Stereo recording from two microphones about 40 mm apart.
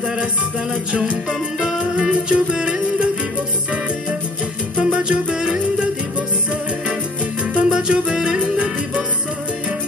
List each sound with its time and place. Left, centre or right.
1.8 s music: right
4.7 s music: right
5.0 s music: right
7.5 s music: right